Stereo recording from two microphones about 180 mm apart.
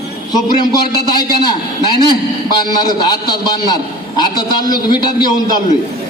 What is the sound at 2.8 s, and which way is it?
A man's voice, 20° left (ahead or behind).